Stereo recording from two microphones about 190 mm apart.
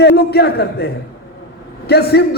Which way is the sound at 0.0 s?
60° left (ahead or behind).